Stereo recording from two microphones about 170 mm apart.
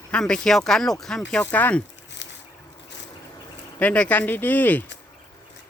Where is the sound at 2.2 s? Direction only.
90° left.